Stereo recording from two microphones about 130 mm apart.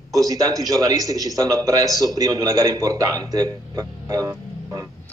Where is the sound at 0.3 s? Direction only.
25° right (ahead or behind).